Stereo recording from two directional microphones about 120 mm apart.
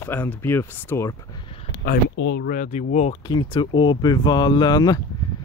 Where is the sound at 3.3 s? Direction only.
40° left (ahead or behind).